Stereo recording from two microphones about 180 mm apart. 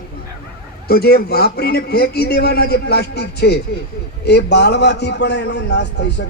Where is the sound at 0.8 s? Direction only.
60° left (ahead or behind).